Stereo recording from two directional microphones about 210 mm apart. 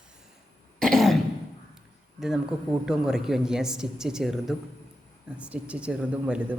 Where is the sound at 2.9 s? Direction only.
Centre (ahead or behind).